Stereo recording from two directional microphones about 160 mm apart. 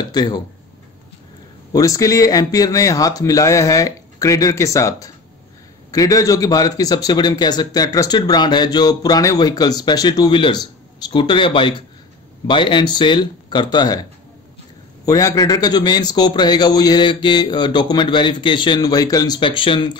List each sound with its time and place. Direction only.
0.1 s speech: 25° left (ahead or behind)
1.7 s a man's voice: 20° left (ahead or behind)
15.0 s a man's voice: 20° left (ahead or behind)